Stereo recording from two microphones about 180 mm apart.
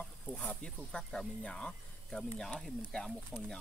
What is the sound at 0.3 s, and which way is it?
Speech, 5° left (ahead or behind).